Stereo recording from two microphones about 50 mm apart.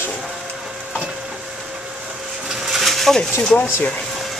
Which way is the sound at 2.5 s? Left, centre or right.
Centre.